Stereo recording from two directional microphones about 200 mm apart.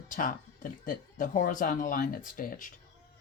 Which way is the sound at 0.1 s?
40° left (ahead or behind).